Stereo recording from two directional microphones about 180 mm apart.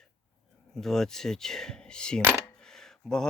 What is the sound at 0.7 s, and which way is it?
Speech, centre (ahead or behind).